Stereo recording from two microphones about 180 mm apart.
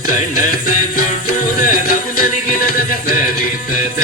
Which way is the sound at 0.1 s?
50° left (ahead or behind).